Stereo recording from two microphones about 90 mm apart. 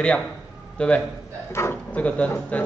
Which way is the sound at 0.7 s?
15° left (ahead or behind).